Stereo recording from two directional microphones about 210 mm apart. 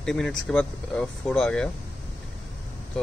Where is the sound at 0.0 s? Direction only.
5° left (ahead or behind).